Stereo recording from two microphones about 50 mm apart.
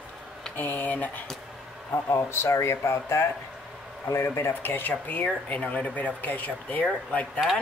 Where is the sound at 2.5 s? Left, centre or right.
Left.